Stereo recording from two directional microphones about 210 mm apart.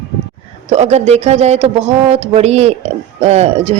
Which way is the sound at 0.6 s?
30° right (ahead or behind).